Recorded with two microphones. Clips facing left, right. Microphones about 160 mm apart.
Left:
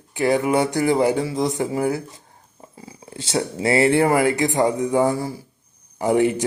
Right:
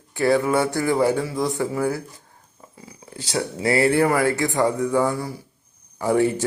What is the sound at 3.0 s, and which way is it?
Speech, 25° left (ahead or behind).